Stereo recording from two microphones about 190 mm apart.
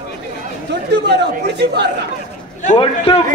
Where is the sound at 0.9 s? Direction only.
60° right (ahead or behind).